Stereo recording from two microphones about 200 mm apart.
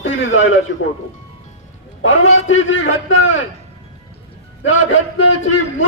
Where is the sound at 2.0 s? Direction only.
75° left (ahead or behind).